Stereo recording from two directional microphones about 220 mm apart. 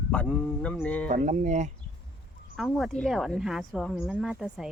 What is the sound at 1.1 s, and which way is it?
Speech, 35° right (ahead or behind).